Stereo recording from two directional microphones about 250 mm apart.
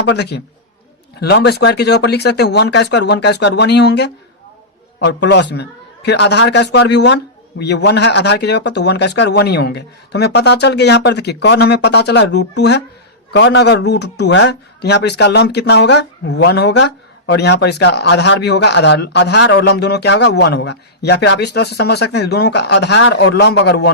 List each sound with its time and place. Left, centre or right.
0.0 s a man's voice: left